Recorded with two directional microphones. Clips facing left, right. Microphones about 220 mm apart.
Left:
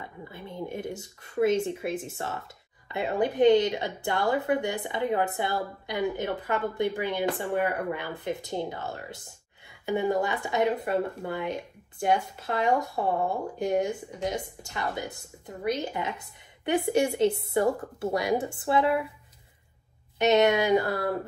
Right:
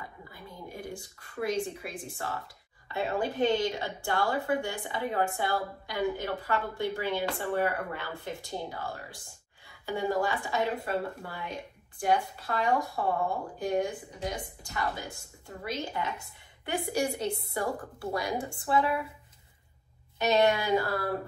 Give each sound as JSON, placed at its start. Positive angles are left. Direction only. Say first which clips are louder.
{"t": 0.3, "sound": "speech", "louder": "left 11 dB", "side_deg": 25}
{"t": 20.2, "sound": "speech", "louder": "left 4 dB", "side_deg": 20}